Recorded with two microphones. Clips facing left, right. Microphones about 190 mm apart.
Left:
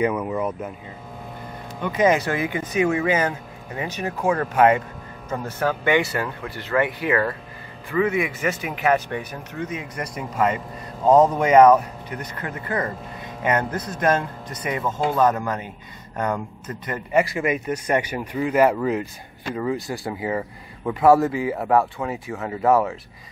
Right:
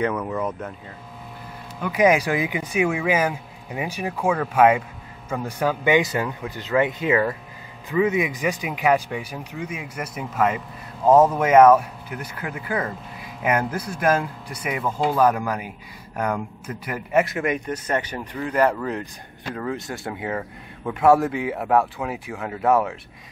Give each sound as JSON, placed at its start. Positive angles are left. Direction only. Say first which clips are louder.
{"t": 0.0, "sound": "speech", "louder": "left 2 dB", "side_deg": 10}
{"t": 1.8, "sound": "speech", "louder": "right 1 dB", "side_deg": -10}